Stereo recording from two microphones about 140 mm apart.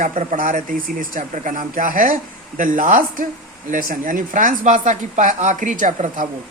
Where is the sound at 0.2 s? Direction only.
60° right (ahead or behind).